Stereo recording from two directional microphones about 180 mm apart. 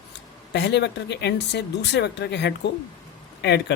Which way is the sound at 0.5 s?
70° left (ahead or behind).